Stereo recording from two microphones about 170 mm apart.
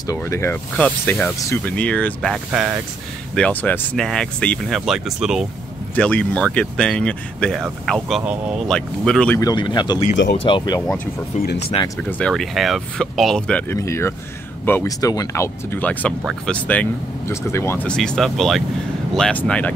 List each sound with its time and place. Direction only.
0.0 s speech: 20° left (ahead or behind); by 2.8 s 5° right (ahead or behind)
3.3 s speech: 10° left (ahead or behind)
5.9 s speech: 5° left (ahead or behind)
9.4 s speech: 25° left (ahead or behind)
12.0 s speech: 5° left (ahead or behind)